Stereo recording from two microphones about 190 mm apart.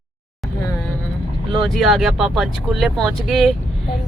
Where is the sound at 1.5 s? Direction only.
Centre (ahead or behind).